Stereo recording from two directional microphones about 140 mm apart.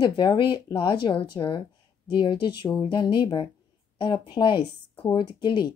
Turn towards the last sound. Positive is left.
turn(degrees=35)  # may be behind; listen again after turning